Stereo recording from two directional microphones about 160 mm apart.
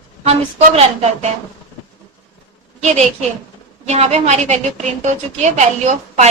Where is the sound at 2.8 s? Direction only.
45° right (ahead or behind).